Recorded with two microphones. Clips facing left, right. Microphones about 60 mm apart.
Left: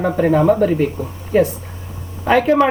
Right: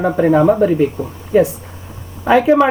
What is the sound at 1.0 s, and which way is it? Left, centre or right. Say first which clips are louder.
Speech: right 2 dB; right.